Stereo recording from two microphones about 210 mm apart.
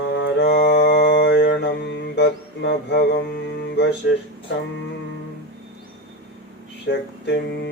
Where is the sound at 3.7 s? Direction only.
55° left (ahead or behind).